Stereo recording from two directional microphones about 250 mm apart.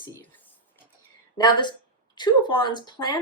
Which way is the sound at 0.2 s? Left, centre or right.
Centre.